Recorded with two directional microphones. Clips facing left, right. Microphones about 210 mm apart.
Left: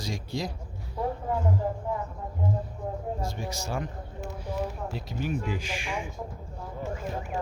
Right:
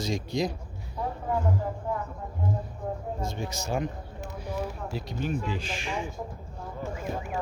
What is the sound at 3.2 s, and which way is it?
Speech, 20° right (ahead or behind).